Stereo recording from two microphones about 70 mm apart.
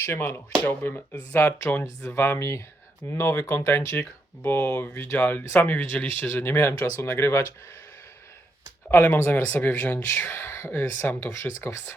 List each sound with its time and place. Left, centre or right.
0.0 s speech: left
8.9 s speech: left